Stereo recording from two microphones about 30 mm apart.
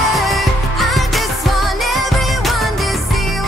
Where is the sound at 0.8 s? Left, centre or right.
Centre.